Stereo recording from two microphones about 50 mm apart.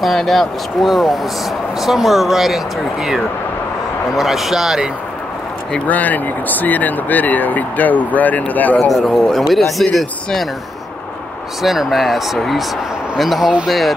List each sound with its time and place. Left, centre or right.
0.0 s speech: centre
4.2 s speech: centre
5.9 s speech: left
9.0 s speech: centre
9.3 s speech: centre
11.6 s speech: centre